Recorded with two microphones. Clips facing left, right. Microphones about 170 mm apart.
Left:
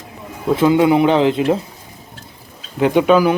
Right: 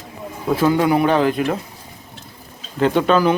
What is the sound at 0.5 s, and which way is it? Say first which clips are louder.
A man's voice: left 3 dB; 20° left (ahead or behind).